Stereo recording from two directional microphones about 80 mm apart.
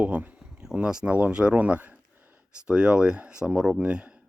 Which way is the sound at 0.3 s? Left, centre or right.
Centre.